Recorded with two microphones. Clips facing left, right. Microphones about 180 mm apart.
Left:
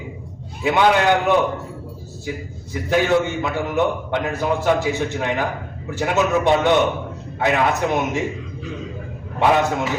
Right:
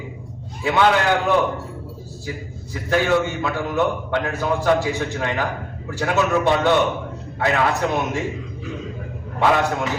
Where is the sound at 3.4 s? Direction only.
15° left (ahead or behind).